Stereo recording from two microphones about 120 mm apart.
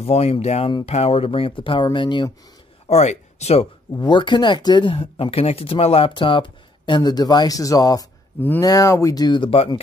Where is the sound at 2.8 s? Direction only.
75° left (ahead or behind).